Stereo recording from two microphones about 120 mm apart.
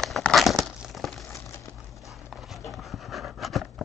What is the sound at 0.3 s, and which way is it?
Crumpling, centre (ahead or behind).